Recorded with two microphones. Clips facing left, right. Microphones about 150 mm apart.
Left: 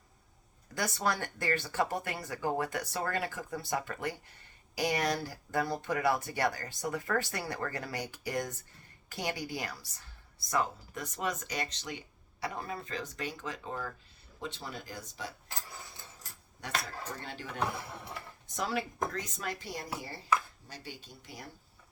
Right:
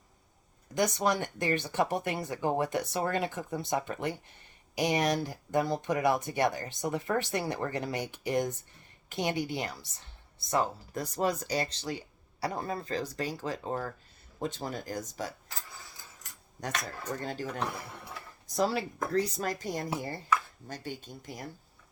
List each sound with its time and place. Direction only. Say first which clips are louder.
0.7 s speech: right 5 dB; 20° right (ahead or behind); by 15.3 s 45° right (ahead or behind)
16.6 s speech: right 1 dB; 45° right (ahead or behind)